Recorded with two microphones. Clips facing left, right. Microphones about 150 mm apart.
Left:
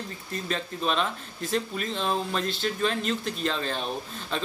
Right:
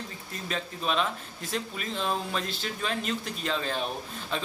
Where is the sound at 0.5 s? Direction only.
5° right (ahead or behind).